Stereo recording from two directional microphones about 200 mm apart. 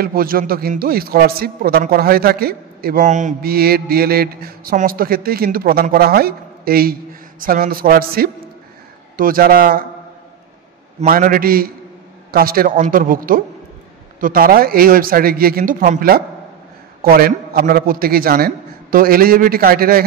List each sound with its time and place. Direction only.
0.0 s speech: 45° right (ahead or behind)
11.0 s speech: 45° right (ahead or behind)